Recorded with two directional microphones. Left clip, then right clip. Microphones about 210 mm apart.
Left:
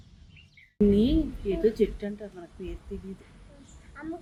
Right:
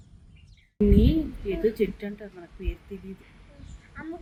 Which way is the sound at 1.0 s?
5° left (ahead or behind).